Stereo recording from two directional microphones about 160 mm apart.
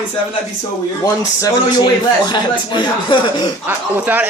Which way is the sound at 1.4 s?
25° left (ahead or behind).